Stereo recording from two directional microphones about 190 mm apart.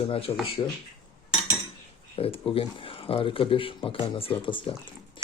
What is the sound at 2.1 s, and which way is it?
Speech, 30° left (ahead or behind).